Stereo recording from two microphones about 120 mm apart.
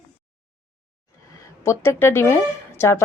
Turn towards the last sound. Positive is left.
turn(degrees=20)  # may be behind; listen again after turning